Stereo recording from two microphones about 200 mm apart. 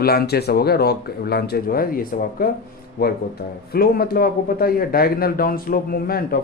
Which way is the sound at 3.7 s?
50° left (ahead or behind).